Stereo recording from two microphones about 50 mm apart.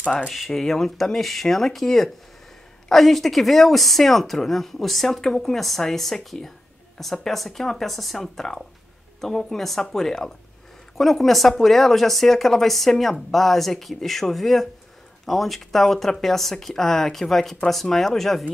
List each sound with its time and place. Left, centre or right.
0.0 s speech: left
0.5 s speech: centre